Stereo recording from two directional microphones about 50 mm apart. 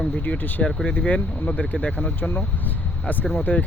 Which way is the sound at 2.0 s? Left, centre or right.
Left.